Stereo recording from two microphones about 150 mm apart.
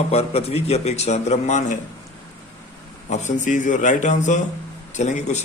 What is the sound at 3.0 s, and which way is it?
A man's voice, 50° left (ahead or behind).